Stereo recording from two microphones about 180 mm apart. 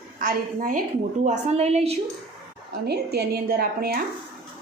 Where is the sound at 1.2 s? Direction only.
35° right (ahead or behind).